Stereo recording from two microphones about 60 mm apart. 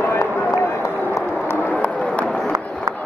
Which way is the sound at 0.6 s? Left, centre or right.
Left.